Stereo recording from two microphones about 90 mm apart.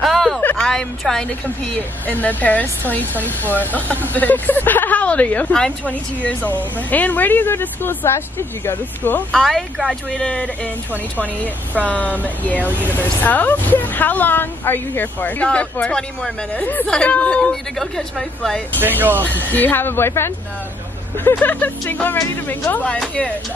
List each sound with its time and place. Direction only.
0.0 s a sound: centre (ahead or behind)
0.6 s speech: 5° left (ahead or behind)
1.7 s speech: 20° left (ahead or behind)
3.2 s speech: 20° right (ahead or behind)
3.5 s speech: 20° left (ahead or behind)
9.3 s speech: centre (ahead or behind)
10.1 s speech: 10° left (ahead or behind)
11.9 s speech: 15° left (ahead or behind)
18.8 s speech: 20° right (ahead or behind)
19.2 s speech: 20° left (ahead or behind)